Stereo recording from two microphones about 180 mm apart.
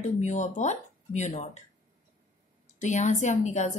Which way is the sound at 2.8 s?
40° left (ahead or behind).